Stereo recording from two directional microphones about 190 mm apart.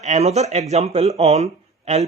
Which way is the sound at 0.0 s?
35° right (ahead or behind).